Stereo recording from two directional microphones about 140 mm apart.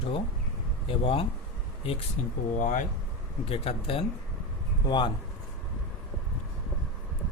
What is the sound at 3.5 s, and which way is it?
Speech, 45° left (ahead or behind).